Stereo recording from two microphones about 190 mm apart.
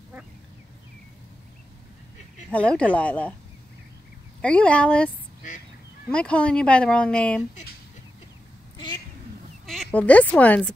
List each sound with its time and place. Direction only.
2.5 s speech: 5° left (ahead or behind)
4.4 s speech: 5° left (ahead or behind)
8.7 s a sound: 25° left (ahead or behind)
9.7 s speech: centre (ahead or behind)